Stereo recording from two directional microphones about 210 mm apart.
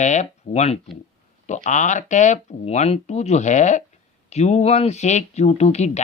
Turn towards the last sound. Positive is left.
turn(degrees=30)  # may be behind; listen again after turning